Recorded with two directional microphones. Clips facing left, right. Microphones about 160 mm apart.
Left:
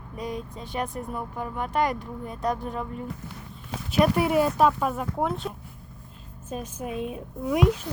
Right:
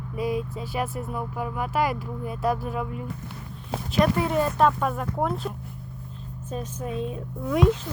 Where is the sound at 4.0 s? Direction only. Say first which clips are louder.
Left 2 dB; 10° left (ahead or behind).